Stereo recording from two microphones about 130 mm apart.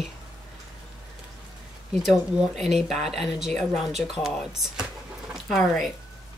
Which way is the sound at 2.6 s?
Centre (ahead or behind).